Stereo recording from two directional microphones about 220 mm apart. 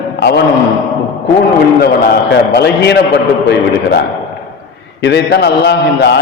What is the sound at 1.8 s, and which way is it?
A man's voice, 45° left (ahead or behind).